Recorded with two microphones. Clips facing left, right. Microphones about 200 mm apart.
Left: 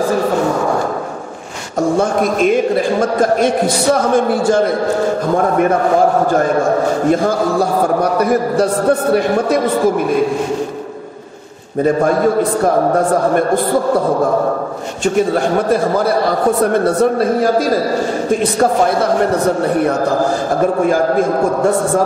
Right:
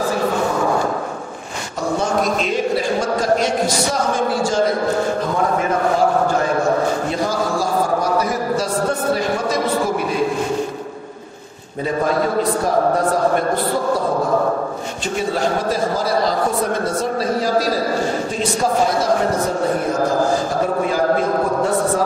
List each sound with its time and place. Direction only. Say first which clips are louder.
1.8 s a man's voice: left 6 dB; 50° left (ahead or behind)
6.3 s a man's voice: left 4 dB; 50° left (ahead or behind)
15.1 s a man's voice: left 5 dB; 55° left (ahead or behind)